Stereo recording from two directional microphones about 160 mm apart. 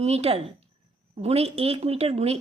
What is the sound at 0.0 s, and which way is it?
A woman's voice, 40° right (ahead or behind).